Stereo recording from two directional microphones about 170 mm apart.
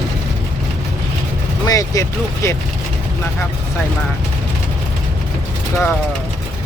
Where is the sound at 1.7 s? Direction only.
20° left (ahead or behind).